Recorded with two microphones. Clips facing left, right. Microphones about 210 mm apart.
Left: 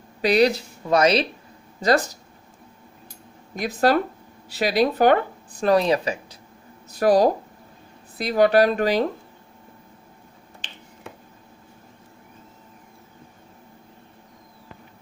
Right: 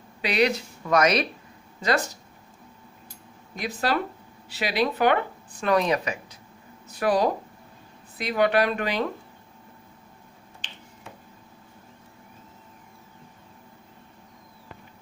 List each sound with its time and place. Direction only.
0.2 s speech: 40° left (ahead or behind)
3.5 s speech: 45° left (ahead or behind)